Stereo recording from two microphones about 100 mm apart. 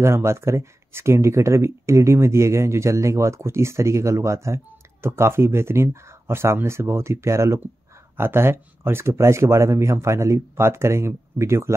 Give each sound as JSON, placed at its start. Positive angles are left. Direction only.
{"t": 0.0, "sound": "speech", "side_deg": -25}